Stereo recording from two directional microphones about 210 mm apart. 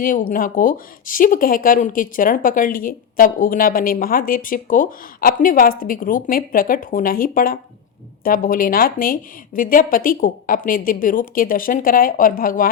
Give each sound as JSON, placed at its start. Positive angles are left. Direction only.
{"t": 0.0, "sound": "speech", "side_deg": 40}